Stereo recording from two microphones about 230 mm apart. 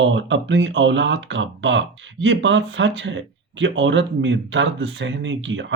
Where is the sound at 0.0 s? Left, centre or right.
Right.